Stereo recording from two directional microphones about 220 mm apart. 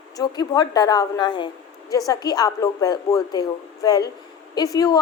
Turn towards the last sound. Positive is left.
turn(degrees=15)  # may be behind; listen again after turning